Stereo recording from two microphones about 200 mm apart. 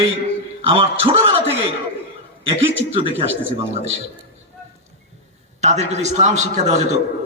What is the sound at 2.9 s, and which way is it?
Speech, 30° right (ahead or behind).